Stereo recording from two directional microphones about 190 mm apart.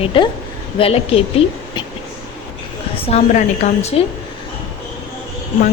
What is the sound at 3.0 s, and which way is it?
A woman's voice, 35° left (ahead or behind).